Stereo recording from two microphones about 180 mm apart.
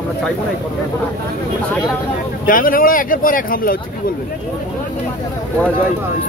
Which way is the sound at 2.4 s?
50° left (ahead or behind).